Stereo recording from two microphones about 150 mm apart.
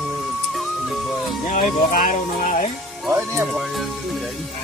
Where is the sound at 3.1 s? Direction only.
20° right (ahead or behind).